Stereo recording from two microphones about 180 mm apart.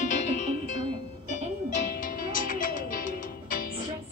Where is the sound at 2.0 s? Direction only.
50° left (ahead or behind).